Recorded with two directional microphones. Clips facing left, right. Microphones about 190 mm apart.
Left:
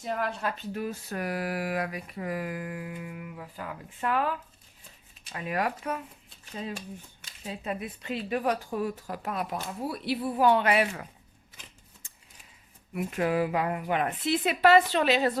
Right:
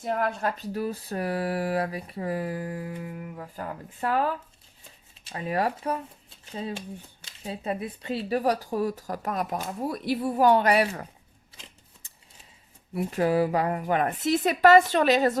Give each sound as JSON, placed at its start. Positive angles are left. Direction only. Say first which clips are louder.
{"t": 0.0, "sound": "a woman's voice", "louder": "right 4 dB", "side_deg": -50}
{"t": 0.7, "sound": "speech", "louder": "right 3 dB", "side_deg": -35}
{"t": 12.9, "sound": "a woman's voice", "louder": "right 3 dB", "side_deg": -35}